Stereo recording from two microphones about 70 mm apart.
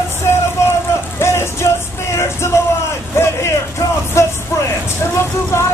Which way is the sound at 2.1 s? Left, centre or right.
Left.